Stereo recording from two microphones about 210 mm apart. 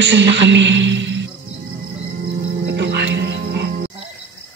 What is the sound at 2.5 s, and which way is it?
Music, 55° right (ahead or behind).